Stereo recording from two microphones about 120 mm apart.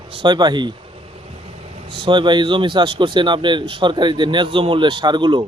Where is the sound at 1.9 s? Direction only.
45° right (ahead or behind).